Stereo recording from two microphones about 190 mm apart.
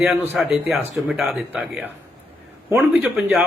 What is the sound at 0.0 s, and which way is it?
Speech, centre (ahead or behind).